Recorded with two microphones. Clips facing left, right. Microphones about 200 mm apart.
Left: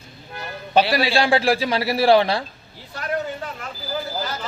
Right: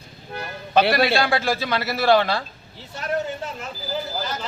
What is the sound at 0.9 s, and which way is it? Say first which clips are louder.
Speech: right 2 dB; 55° right (ahead or behind).